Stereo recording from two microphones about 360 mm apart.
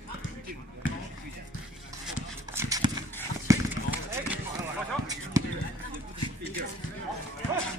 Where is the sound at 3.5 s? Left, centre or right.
Centre.